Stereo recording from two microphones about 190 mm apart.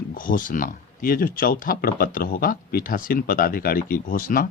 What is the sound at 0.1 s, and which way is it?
Speech, 45° left (ahead or behind).